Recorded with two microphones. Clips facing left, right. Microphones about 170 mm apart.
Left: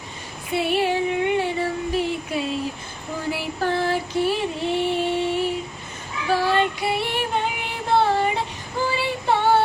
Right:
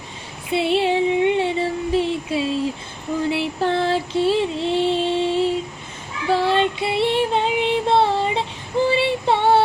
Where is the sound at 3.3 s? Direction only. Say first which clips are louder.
Right 3 dB; 25° right (ahead or behind).